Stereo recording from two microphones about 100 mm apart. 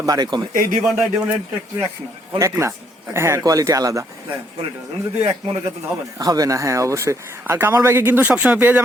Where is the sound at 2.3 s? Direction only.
30° right (ahead or behind).